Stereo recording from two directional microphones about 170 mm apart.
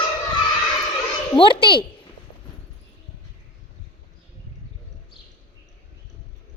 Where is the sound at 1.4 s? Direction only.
30° left (ahead or behind).